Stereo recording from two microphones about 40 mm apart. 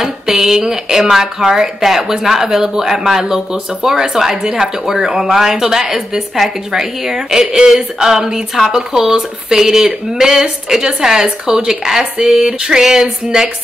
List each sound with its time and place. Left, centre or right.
0.0 s speech: centre